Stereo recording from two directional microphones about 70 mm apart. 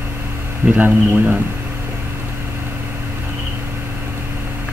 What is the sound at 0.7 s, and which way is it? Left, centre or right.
Speech, right.